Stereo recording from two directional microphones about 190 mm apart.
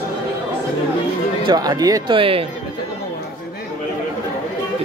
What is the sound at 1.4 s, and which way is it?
Speech, 20° right (ahead or behind).